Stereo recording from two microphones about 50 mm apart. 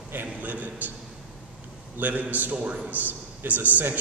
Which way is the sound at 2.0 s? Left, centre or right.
Right.